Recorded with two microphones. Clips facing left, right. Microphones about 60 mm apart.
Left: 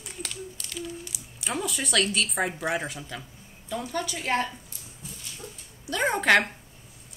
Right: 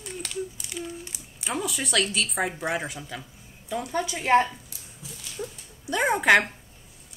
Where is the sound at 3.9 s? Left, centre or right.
Centre.